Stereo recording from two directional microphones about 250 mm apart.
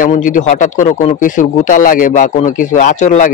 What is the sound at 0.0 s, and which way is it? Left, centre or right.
Speech, left.